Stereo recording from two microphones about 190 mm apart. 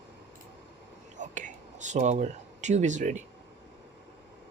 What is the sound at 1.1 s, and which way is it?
Whispering, 40° right (ahead or behind).